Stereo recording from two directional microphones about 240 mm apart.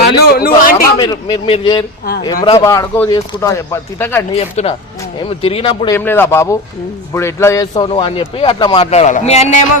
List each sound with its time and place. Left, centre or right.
0.0 s a man's voice: left
0.9 s a man's voice: centre
4.4 s a man's voice: left
6.0 s a man's voice: centre; by 9.6 s left